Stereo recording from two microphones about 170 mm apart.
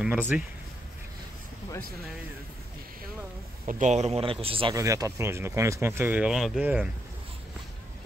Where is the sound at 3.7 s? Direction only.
45° right (ahead or behind).